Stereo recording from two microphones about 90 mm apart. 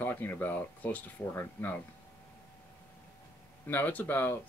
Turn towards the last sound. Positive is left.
turn(degrees=20)  # may be behind; listen again after turning